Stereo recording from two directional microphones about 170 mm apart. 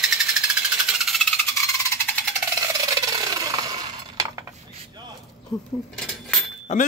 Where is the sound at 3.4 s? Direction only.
20° right (ahead or behind).